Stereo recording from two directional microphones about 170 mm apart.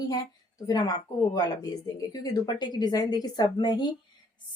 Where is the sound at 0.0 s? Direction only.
20° left (ahead or behind).